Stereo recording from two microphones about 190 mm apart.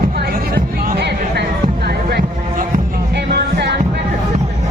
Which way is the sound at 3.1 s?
60° right (ahead or behind).